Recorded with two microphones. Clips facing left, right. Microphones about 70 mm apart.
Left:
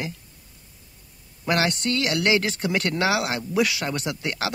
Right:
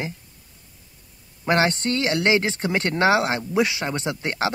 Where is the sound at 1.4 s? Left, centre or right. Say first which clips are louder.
Right 3 dB; right.